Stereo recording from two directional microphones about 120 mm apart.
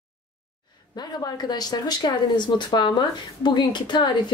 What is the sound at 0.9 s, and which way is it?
Speech, 35° left (ahead or behind).